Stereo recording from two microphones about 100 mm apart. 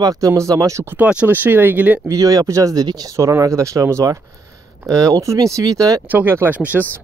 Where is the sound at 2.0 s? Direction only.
35° right (ahead or behind).